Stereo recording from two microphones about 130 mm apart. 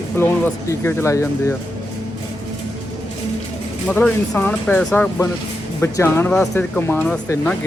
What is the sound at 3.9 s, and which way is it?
Speech, 10° left (ahead or behind).